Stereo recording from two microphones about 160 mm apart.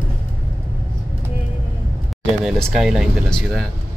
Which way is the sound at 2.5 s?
5° right (ahead or behind).